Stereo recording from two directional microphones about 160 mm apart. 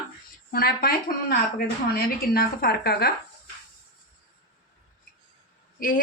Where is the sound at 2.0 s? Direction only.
70° left (ahead or behind).